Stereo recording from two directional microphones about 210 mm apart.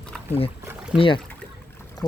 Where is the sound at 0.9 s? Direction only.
25° left (ahead or behind).